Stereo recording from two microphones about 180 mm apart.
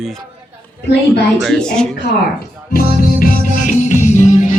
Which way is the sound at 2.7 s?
55° left (ahead or behind).